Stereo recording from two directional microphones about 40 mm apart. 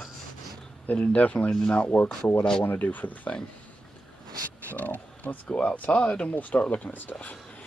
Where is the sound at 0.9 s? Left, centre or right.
Left.